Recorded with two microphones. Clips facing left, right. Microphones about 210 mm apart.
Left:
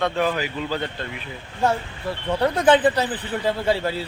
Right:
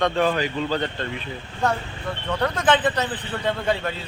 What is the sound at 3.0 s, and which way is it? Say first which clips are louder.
Speech: left 2 dB; 30° left (ahead or behind).